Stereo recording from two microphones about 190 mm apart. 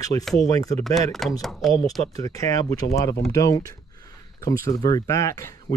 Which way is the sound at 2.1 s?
20° left (ahead or behind).